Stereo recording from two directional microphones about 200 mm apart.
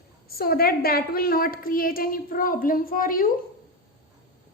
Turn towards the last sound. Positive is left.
turn(degrees=45)  # may be behind; listen again after turning